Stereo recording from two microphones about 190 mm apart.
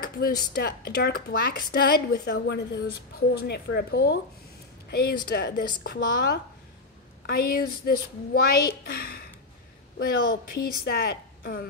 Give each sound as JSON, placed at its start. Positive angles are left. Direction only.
{"t": 0.0, "sound": "a woman's voice", "side_deg": 55}